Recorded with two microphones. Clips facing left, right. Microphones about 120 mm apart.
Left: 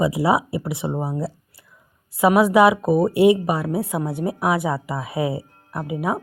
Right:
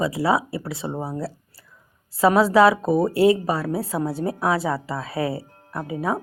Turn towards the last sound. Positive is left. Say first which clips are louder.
# left 1 dB
turn(degrees=15)  # may be behind; listen again after turning